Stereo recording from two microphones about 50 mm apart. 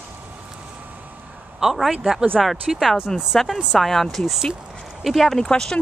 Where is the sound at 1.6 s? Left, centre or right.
Centre.